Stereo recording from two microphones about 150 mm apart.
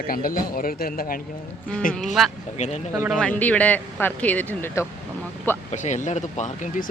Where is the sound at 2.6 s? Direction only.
50° left (ahead or behind).